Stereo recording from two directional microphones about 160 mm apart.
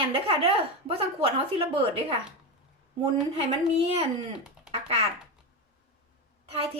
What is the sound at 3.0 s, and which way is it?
A woman's voice, 35° right (ahead or behind).